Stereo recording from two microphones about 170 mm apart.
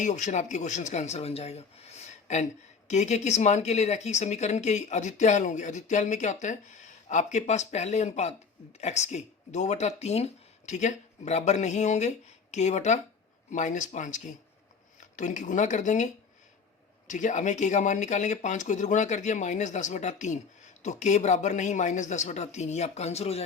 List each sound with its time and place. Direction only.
0.0 s speech: 45° left (ahead or behind)
17.1 s speech: 45° left (ahead or behind)